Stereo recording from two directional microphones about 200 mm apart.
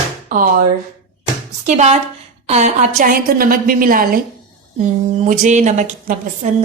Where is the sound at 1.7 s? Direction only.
35° right (ahead or behind).